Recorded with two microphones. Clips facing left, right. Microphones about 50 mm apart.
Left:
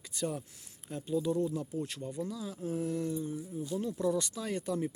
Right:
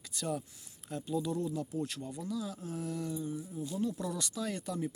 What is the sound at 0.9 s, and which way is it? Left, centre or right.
Speech, centre.